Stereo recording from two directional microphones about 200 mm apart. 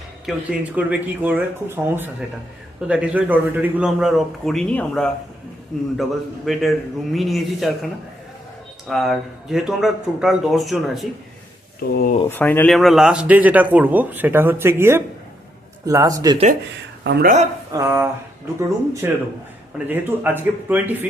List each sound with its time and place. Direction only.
0.3 s a man's voice: 5° right (ahead or behind)
8.9 s a man's voice: centre (ahead or behind)
11.9 s speech: 45° left (ahead or behind)
12.4 s speech: 10° left (ahead or behind); by 16.4 s 20° right (ahead or behind)
17.0 s speech: 60° right (ahead or behind)
17.7 s speech: 15° right (ahead or behind)